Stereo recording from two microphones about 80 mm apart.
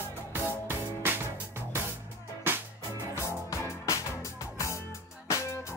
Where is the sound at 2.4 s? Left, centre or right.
Right.